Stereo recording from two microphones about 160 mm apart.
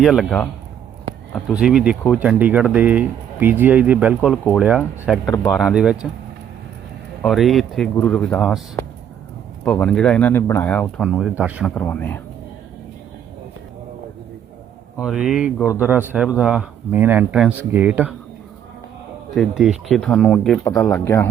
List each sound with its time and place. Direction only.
0.0 s speech: centre (ahead or behind)
7.2 s speech: centre (ahead or behind)
9.6 s speech: 5° left (ahead or behind)
11.0 s speech: 5° right (ahead or behind)
11.6 s speech: 10° left (ahead or behind)
15.0 s speech: 5° right (ahead or behind)
19.3 s speech: centre (ahead or behind); by 21.2 s 15° left (ahead or behind)